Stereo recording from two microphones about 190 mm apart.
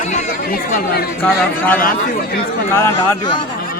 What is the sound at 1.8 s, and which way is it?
Speech, 50° left (ahead or behind).